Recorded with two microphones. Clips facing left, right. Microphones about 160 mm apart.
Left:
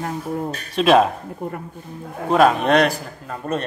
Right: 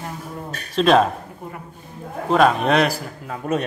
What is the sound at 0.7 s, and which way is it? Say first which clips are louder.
Speech: left 1 dB; centre (ahead or behind).